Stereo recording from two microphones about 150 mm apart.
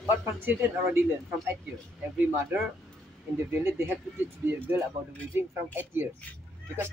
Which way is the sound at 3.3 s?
15° right (ahead or behind).